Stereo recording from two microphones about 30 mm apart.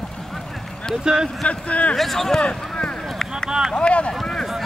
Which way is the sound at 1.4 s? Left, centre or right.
Left.